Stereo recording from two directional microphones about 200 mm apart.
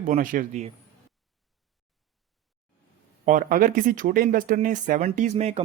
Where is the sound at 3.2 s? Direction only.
45° right (ahead or behind).